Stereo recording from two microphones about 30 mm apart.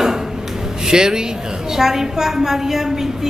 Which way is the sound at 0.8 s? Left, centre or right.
Right.